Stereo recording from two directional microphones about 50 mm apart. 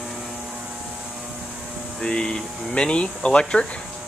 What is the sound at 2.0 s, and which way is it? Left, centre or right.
Speech, centre.